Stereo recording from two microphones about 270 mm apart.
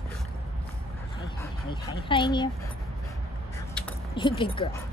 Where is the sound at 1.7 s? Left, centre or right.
Centre.